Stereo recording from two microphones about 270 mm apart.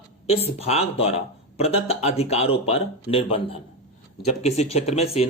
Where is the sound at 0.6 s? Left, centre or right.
Left.